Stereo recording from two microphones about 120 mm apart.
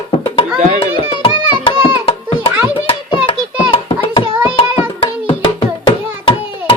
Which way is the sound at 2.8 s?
45° left (ahead or behind).